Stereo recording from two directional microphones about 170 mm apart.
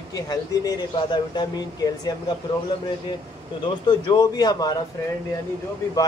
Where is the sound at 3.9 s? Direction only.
25° left (ahead or behind).